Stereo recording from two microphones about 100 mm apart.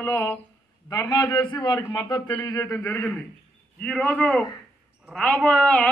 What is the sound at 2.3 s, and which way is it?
Speech, 35° left (ahead or behind).